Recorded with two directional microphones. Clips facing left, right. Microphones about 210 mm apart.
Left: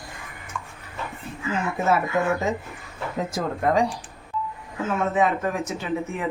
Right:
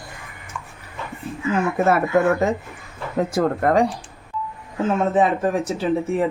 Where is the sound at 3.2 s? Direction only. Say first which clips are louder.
Right 7 dB; 55° right (ahead or behind).